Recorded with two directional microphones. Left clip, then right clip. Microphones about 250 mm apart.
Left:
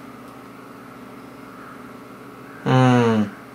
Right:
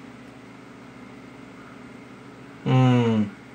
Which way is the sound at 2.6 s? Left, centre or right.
Left.